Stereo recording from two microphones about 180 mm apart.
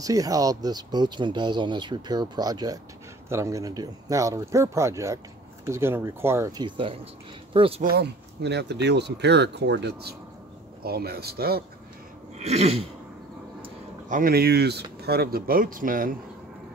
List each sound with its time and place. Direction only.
0.0 s speech: 20° right (ahead or behind)
7.8 s speech: 65° right (ahead or behind)
10.8 s speech: 60° right (ahead or behind)
12.4 s sneeze: 35° right (ahead or behind)
14.0 s speech: 50° right (ahead or behind)